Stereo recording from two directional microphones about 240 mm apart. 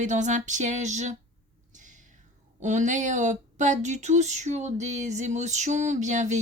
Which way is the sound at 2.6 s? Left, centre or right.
Right.